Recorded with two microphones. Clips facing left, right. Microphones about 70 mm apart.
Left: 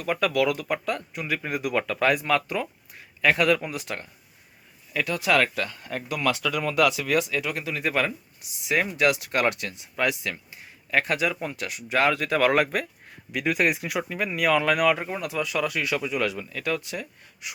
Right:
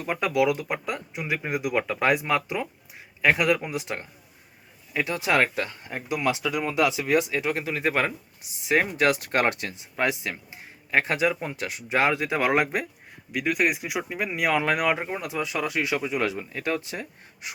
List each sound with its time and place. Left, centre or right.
0.0 s speech: right
13.3 s speech: centre; by 17.5 s right